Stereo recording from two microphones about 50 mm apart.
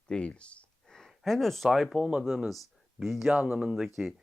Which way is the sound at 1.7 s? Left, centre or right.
Centre.